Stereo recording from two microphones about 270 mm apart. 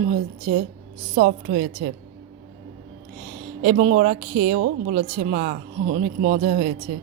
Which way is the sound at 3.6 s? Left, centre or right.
Right.